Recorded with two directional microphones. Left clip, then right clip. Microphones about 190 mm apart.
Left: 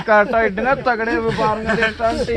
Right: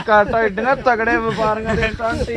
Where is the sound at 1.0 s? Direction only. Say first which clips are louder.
Right 2 dB; 30° right (ahead or behind).